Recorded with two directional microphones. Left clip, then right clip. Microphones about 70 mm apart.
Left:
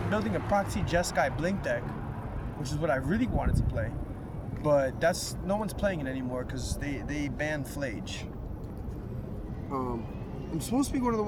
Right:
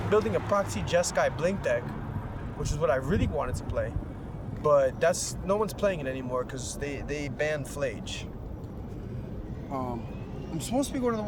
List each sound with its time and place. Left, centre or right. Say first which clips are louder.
0.1 s speech: right 4 dB; right
9.7 s speech: even; right